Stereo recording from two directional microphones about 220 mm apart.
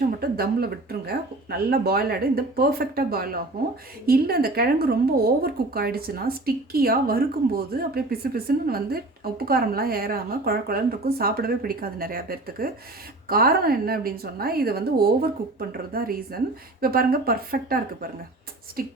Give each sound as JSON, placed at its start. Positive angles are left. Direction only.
{"t": 0.2, "sound": "a woman's voice", "side_deg": -45}